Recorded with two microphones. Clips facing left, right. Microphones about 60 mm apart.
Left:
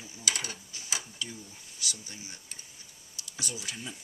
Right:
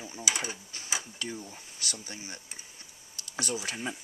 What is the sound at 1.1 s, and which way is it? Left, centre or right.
Speech, right.